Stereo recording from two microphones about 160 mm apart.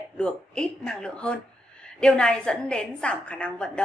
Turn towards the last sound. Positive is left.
turn(degrees=5)  # may be behind; listen again after turning